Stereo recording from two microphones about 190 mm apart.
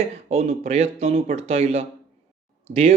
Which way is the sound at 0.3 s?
30° right (ahead or behind).